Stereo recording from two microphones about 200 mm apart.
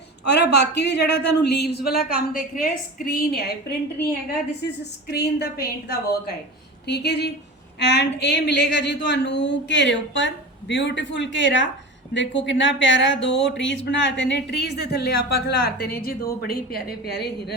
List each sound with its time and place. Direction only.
0.3 s a woman's voice: 55° left (ahead or behind)
5.1 s a woman's voice: 55° left (ahead or behind)